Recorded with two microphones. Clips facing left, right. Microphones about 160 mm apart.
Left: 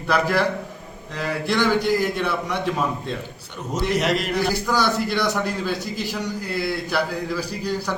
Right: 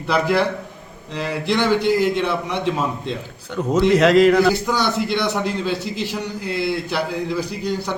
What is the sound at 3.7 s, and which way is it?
Speech, 90° right.